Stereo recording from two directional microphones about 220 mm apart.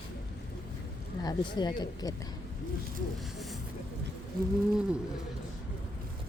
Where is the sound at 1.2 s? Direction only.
20° left (ahead or behind).